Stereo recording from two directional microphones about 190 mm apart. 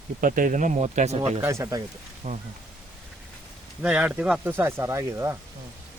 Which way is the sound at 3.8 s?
5° right (ahead or behind).